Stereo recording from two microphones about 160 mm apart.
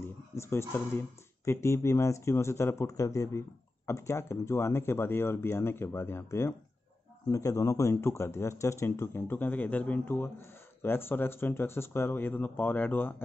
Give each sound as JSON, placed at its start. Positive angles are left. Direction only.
{"t": 0.4, "sound": "speech", "side_deg": 15}